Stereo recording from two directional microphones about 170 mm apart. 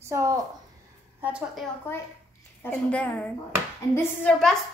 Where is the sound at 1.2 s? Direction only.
5° right (ahead or behind).